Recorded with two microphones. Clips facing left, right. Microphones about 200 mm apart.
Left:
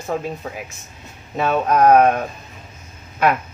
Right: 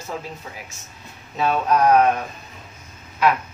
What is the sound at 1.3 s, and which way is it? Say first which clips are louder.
Speech: left 2 dB; 55° left (ahead or behind).